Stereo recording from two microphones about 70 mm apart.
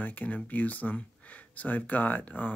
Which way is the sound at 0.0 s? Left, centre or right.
Left.